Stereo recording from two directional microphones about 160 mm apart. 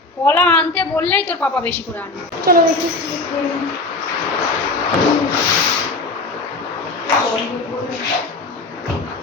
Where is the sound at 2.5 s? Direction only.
65° right (ahead or behind).